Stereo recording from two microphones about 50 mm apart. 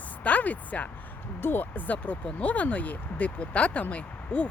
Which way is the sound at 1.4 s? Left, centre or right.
Left.